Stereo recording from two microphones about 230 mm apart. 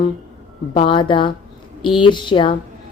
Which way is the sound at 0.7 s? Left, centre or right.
Left.